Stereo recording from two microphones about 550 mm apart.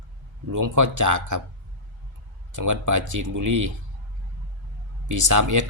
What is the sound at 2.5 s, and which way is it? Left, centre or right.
Speech, right.